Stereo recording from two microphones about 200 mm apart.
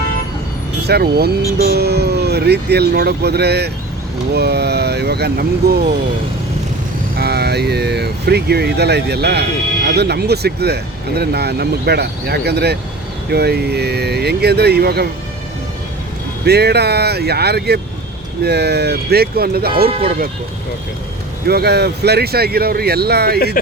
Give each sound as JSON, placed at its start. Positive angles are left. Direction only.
{"t": 0.9, "sound": "speech", "side_deg": -55}
{"t": 7.2, "sound": "speech", "side_deg": -55}
{"t": 16.5, "sound": "speech", "side_deg": -55}
{"t": 21.4, "sound": "speech", "side_deg": -50}